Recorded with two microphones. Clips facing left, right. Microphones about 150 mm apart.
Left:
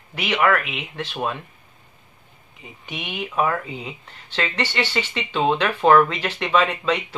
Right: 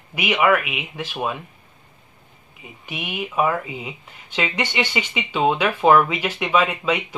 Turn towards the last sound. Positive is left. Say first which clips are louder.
# even
turn(degrees=-10)  # may be behind; listen again after turning